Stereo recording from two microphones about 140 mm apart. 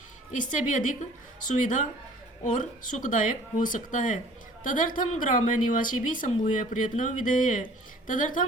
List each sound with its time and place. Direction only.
0.3 s a woman's voice: 70° left (ahead or behind)